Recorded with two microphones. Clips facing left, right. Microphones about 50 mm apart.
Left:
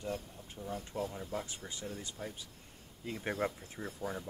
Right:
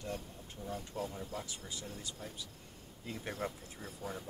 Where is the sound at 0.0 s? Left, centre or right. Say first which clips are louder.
Left 2 dB; centre.